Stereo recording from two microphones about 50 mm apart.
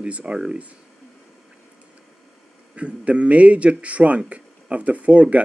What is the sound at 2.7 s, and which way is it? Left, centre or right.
Speech, right.